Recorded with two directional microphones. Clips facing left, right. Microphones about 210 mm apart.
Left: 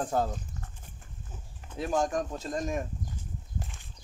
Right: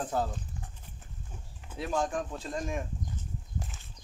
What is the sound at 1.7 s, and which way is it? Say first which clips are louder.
Speech: left 3 dB; 45° left (ahead or behind).